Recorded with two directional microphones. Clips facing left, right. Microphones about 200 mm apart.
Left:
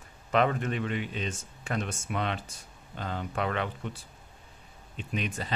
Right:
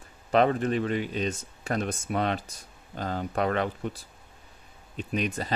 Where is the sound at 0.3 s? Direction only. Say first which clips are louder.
Right 4 dB; 35° right (ahead or behind).